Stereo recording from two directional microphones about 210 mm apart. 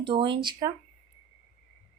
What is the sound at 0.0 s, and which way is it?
Speech, 25° right (ahead or behind).